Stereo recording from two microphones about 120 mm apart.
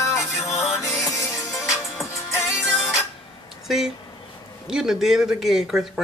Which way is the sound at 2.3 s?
20° left (ahead or behind).